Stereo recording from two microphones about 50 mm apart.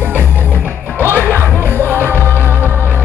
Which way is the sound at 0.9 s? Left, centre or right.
Right.